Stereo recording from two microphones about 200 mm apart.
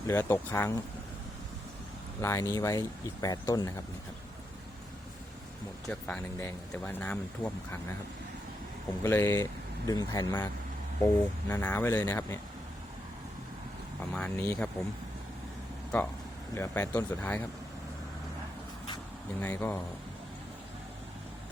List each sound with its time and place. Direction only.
0.1 s speech: 15° left (ahead or behind)
2.2 s speech: 15° left (ahead or behind)
5.9 s speech: 5° left (ahead or behind)
9.0 s speech: 10° left (ahead or behind)
14.1 s speech: 5° left (ahead or behind)
15.9 s speech: 5° left (ahead or behind)
19.4 s speech: 10° left (ahead or behind)